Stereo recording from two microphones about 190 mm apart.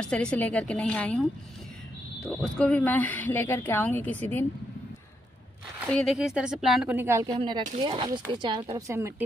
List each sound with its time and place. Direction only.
0.0 s speech: 5° left (ahead or behind)
5.9 s speech: centre (ahead or behind); by 7.3 s 15° right (ahead or behind)
7.3 s speech: 25° right (ahead or behind)